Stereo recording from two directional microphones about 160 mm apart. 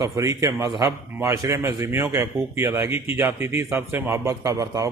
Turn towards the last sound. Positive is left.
turn(degrees=-20)  # may be behind; listen again after turning